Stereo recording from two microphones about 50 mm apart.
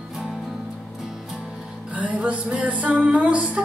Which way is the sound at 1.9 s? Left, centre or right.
Right.